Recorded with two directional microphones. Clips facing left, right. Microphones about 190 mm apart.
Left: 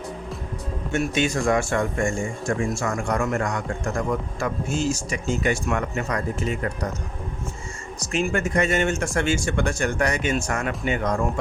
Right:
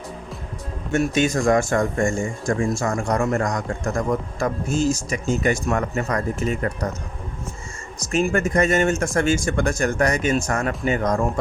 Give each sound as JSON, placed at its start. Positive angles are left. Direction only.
{"t": 0.9, "sound": "speech", "side_deg": -45}
{"t": 8.1, "sound": "speech", "side_deg": -40}